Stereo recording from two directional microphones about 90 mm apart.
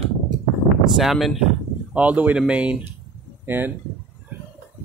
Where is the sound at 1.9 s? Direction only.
15° right (ahead or behind).